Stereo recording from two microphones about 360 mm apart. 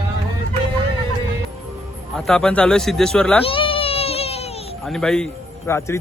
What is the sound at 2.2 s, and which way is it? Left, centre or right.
Speech, centre.